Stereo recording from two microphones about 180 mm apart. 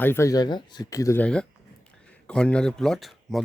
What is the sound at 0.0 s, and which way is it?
Speech, 15° left (ahead or behind).